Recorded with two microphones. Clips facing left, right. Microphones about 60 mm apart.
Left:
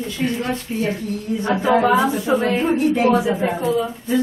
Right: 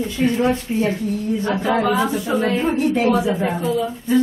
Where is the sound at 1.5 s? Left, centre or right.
Centre.